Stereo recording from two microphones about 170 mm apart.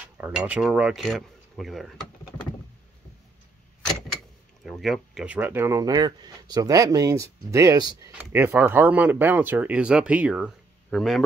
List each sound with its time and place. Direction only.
0.2 s speech: 5° right (ahead or behind)
4.6 s speech: centre (ahead or behind); by 8.1 s 20° right (ahead or behind)
8.1 s speech: 10° right (ahead or behind)